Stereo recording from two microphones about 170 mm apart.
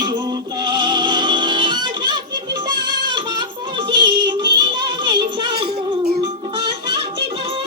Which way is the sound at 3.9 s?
25° right (ahead or behind).